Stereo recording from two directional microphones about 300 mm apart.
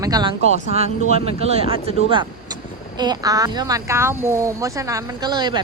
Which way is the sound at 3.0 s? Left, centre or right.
Centre.